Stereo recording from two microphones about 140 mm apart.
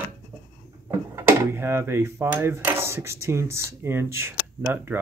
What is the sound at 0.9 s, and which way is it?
Dishes, 20° right (ahead or behind).